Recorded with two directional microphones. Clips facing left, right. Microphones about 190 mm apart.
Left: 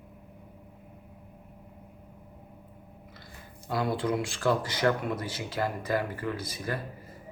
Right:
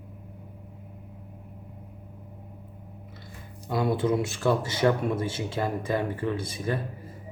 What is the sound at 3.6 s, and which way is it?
Speech, 25° right (ahead or behind).